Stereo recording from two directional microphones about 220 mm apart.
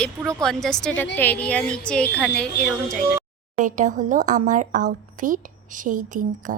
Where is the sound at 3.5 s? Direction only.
35° right (ahead or behind).